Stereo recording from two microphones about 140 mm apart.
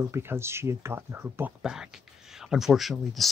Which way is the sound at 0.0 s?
15° right (ahead or behind).